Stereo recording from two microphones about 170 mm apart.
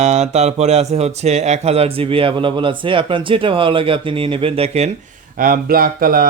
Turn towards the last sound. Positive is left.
turn(degrees=-60)  # may be behind; listen again after turning